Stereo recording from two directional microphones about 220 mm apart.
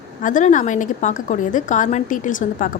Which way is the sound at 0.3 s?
35° left (ahead or behind).